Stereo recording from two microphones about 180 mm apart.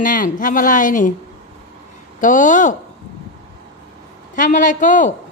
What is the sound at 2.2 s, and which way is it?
Speech, 45° left (ahead or behind).